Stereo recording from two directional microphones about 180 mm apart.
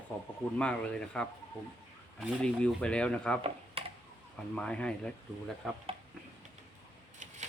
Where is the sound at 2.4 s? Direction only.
5° left (ahead or behind).